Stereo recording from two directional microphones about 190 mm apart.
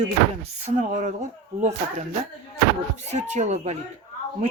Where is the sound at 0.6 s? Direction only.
40° right (ahead or behind).